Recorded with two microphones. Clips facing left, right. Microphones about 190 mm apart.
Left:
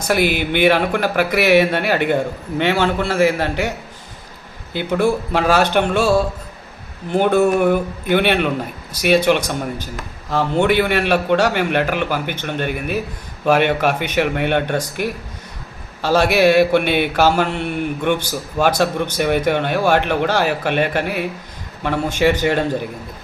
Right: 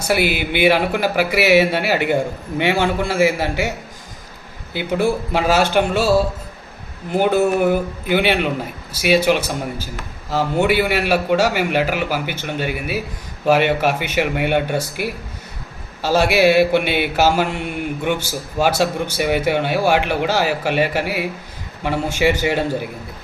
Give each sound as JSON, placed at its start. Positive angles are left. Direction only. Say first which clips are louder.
{"t": 0.0, "sound": "a man's voice", "louder": "left 1 dB", "side_deg": -10}
{"t": 4.9, "sound": "a man's voice", "louder": "left 1 dB", "side_deg": -10}
{"t": 16.9, "sound": "mantra", "louder": "left 2 dB", "side_deg": 55}
{"t": 17.2, "sound": "a man's voice", "louder": "left 1 dB", "side_deg": -10}